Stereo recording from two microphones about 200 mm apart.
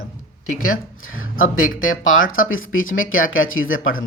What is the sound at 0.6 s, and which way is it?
Speech, 90° left.